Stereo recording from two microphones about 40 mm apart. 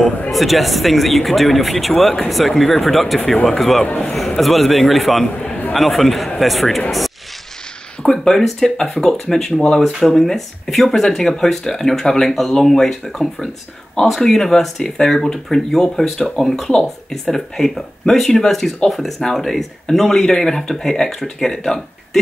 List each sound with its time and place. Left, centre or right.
0.3 s speech: centre
8.0 s speech: centre
9.3 s speech: centre
10.0 s speech: centre